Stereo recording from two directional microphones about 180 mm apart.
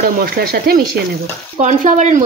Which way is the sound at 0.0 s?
55° right (ahead or behind).